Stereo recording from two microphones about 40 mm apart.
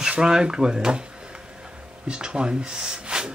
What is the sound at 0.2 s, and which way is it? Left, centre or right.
Speech, centre.